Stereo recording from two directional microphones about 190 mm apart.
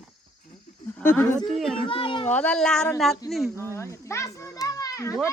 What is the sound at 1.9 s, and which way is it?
Speech, 25° left (ahead or behind).